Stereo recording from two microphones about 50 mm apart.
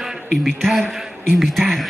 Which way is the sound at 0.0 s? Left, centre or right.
Centre.